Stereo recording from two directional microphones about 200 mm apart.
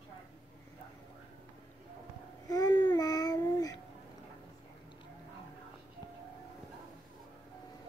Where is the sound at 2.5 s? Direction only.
20° left (ahead or behind).